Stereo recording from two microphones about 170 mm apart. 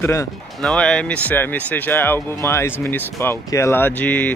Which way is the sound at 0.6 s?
5° left (ahead or behind).